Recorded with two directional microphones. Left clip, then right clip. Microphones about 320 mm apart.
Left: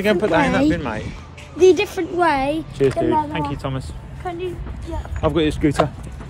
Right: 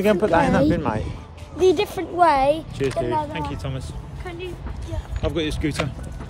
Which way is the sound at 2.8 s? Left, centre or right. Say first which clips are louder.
Left 5 dB; centre.